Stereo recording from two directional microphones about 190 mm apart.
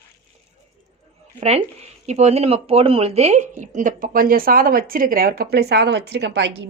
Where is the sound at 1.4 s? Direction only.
35° right (ahead or behind); by 6.5 s 65° right (ahead or behind).